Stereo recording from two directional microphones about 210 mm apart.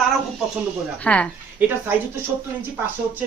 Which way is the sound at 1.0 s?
5° left (ahead or behind).